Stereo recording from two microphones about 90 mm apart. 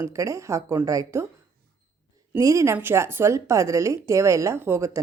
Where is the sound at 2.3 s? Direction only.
35° right (ahead or behind).